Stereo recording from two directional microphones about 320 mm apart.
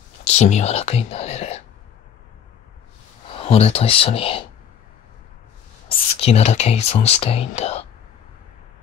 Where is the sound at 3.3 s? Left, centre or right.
Centre.